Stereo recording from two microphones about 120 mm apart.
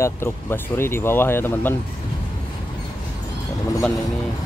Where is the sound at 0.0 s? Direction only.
20° left (ahead or behind).